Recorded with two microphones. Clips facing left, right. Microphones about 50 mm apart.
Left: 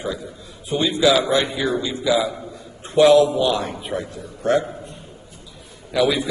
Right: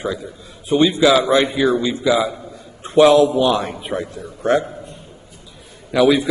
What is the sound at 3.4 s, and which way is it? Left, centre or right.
Speech, right.